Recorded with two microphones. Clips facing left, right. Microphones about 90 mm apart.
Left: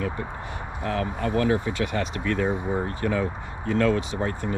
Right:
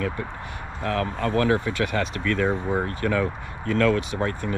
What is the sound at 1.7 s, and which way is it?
Speech, 20° left (ahead or behind).